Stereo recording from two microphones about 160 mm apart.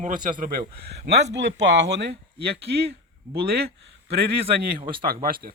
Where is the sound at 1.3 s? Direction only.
90° right.